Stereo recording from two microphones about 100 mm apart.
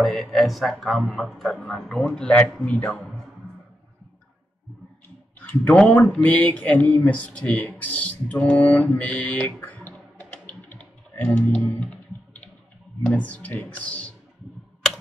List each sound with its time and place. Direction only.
0.0 s speech: centre (ahead or behind)
5.8 s speech: 10° left (ahead or behind)
8.9 s typing: 15° left (ahead or behind)
13.0 s speech: 15° left (ahead or behind)